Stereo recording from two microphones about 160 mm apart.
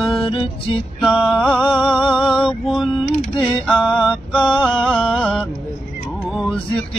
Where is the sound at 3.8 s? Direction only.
30° left (ahead or behind).